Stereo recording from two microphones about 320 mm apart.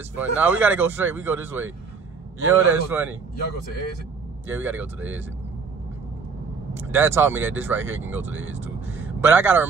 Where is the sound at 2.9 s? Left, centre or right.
Centre.